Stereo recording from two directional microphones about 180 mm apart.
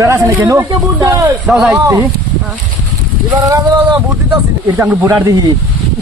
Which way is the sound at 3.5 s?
20° right (ahead or behind).